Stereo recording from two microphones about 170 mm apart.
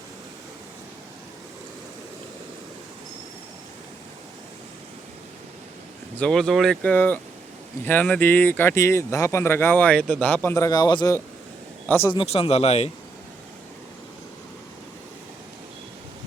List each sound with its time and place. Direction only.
6.1 s speech: 5° left (ahead or behind)
12.1 s speech: 35° left (ahead or behind)